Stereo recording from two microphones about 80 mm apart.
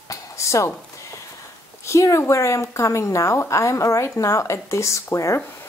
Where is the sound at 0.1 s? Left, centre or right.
Left.